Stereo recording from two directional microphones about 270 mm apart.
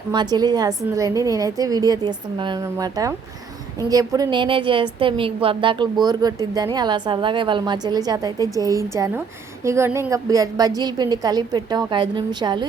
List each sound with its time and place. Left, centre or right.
0.1 s a woman's voice: centre